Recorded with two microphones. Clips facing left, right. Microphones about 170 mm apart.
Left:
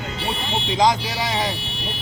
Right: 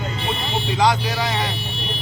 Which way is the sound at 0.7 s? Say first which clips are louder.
Even; 15° left (ahead or behind).